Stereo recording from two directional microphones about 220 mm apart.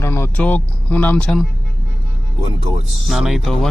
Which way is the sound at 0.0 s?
10° left (ahead or behind).